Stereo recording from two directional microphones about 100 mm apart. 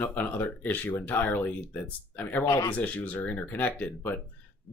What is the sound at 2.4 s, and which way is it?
Speech, 35° left (ahead or behind).